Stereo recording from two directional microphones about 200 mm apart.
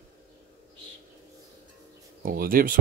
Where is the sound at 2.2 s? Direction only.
45° right (ahead or behind).